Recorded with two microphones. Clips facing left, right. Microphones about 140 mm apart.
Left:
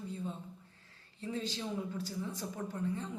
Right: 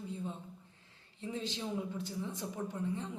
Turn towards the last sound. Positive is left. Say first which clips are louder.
# even
turn(degrees=-20)  # may be behind; listen again after turning